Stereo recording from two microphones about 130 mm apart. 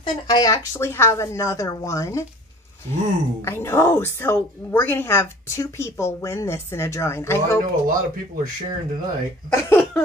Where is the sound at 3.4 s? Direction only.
20° left (ahead or behind).